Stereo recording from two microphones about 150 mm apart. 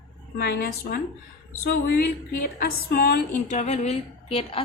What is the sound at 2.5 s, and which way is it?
Music, 75° left (ahead or behind).